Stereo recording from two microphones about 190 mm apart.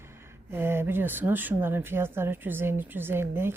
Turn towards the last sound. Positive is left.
turn(degrees=-10)  # may be behind; listen again after turning